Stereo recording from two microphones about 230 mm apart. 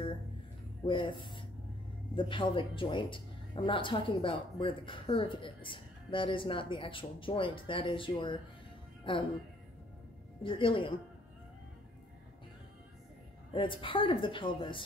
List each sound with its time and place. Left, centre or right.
0.8 s speech: left
10.4 s speech: left
13.5 s speech: left